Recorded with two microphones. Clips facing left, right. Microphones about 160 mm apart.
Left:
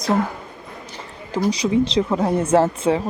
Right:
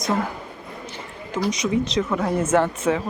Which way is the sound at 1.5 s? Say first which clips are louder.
Left 5 dB; 30° left (ahead or behind).